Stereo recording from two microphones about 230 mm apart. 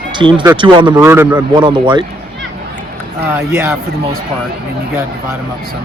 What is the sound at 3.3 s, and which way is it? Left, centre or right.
Speech, centre.